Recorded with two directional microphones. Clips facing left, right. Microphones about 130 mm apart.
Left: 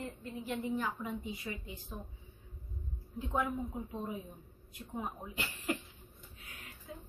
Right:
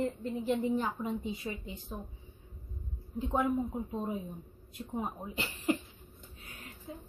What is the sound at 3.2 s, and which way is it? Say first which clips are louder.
Speech: right 3 dB; 25° right (ahead or behind).